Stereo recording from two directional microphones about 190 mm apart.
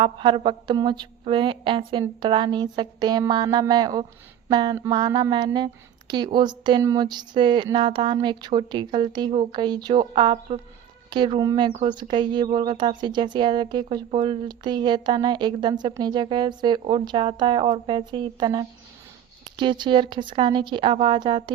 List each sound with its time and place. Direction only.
0.0 s speech: 25° right (ahead or behind)